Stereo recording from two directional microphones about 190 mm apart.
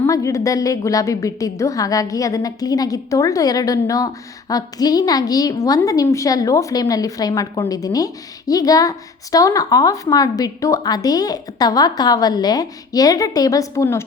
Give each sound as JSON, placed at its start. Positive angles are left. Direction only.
{"t": 0.0, "sound": "a woman's voice", "side_deg": 15}